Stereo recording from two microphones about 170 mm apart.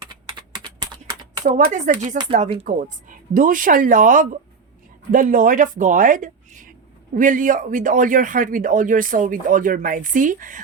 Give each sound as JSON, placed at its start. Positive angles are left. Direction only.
{"t": 0.1, "sound": "typing", "side_deg": -25}
{"t": 1.5, "sound": "speech", "side_deg": -45}